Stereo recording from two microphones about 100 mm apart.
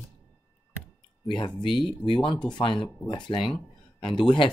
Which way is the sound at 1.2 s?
55° left (ahead or behind).